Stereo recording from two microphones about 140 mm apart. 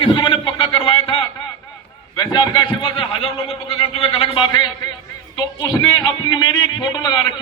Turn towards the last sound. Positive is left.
turn(degrees=30)  # may be behind; listen again after turning